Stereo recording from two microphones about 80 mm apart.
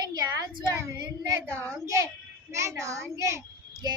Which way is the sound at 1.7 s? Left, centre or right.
Right.